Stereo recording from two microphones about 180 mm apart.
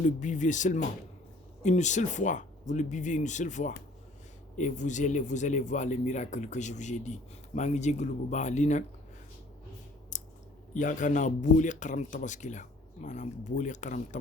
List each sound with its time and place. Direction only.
0.0 s a man's voice: 45° left (ahead or behind)
10.1 s a sound: 45° left (ahead or behind)
10.8 s speech: 45° left (ahead or behind)